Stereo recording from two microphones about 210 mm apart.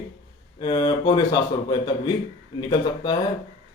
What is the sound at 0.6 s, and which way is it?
Speech, 20° left (ahead or behind).